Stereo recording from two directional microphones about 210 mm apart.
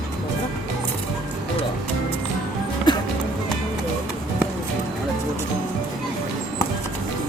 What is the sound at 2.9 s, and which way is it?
Music, 20° left (ahead or behind).